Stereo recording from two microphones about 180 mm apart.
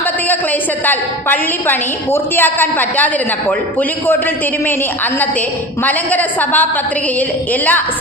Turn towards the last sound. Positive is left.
turn(degrees=10)  # may be behind; listen again after turning